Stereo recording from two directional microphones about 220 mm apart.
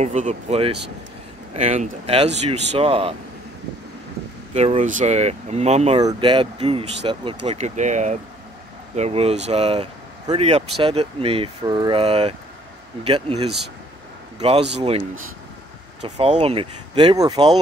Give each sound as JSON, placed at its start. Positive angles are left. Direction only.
{"t": 0.0, "sound": "speech", "side_deg": -30}
{"t": 4.6, "sound": "speech", "side_deg": -30}
{"t": 5.9, "sound": "speech", "side_deg": -20}